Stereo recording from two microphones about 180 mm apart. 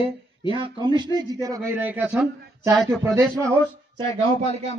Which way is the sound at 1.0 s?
25° right (ahead or behind).